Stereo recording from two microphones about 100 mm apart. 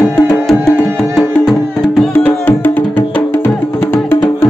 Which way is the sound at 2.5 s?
20° left (ahead or behind).